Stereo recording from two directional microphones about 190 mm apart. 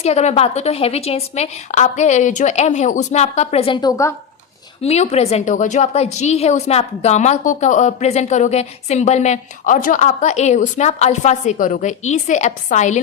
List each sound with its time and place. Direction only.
0.0 s a woman's voice: 35° left (ahead or behind); by 4.1 s 20° left (ahead or behind)
4.8 s a woman's voice: 35° left (ahead or behind)